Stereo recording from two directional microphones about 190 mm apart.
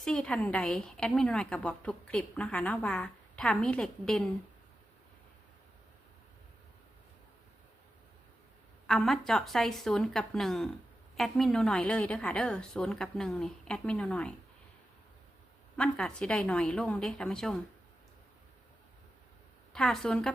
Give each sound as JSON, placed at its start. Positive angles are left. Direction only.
{"t": 0.0, "sound": "a woman's voice", "side_deg": 5}
{"t": 8.9, "sound": "a woman's voice", "side_deg": 5}
{"t": 15.8, "sound": "a woman's voice", "side_deg": 5}
{"t": 19.7, "sound": "a woman's voice", "side_deg": 5}